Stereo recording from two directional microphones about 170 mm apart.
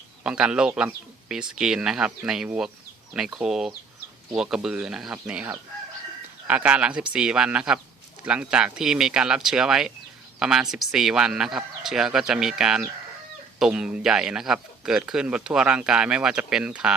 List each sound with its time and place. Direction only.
0.2 s a man's voice: 5° right (ahead or behind)